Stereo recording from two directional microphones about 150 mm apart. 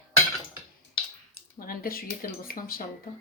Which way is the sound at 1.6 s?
75° left (ahead or behind).